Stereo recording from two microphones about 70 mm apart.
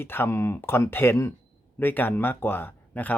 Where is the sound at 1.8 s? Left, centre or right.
Left.